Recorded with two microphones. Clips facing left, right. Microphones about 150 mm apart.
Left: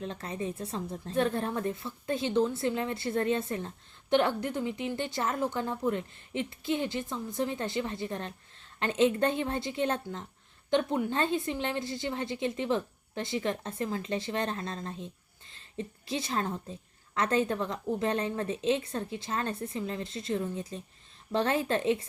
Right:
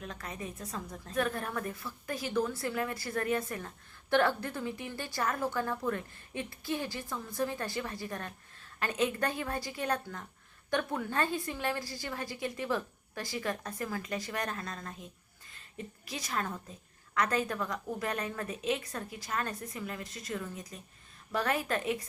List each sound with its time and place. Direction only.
0.0 s a woman's voice: 30° left (ahead or behind)